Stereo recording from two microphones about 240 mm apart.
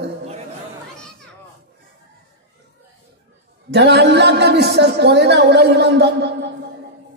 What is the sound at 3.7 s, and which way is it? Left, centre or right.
A woman's voice, right.